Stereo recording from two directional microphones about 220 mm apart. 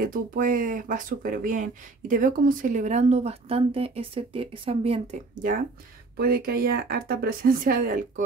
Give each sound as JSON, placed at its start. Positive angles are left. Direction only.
{"t": 0.0, "sound": "speech", "side_deg": -40}